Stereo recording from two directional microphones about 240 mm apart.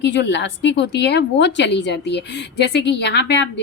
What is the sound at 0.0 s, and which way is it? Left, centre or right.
A woman's voice, left.